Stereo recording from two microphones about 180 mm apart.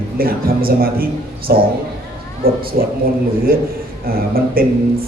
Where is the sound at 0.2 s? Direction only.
55° right (ahead or behind).